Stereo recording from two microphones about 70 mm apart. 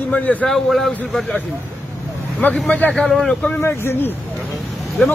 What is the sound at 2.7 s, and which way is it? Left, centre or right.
Speech, left.